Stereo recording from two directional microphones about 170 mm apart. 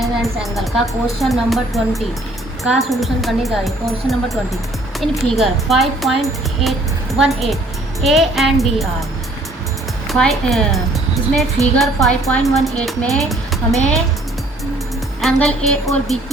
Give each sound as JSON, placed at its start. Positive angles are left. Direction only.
{"t": 0.0, "sound": "a woman's voice", "side_deg": 0}
{"t": 10.1, "sound": "a woman's voice", "side_deg": 0}
{"t": 15.2, "sound": "a woman's voice", "side_deg": 0}